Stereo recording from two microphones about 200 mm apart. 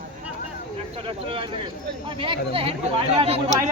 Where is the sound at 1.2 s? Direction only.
25° right (ahead or behind).